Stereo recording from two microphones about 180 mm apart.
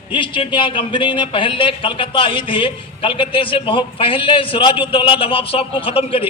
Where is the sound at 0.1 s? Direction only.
30° left (ahead or behind).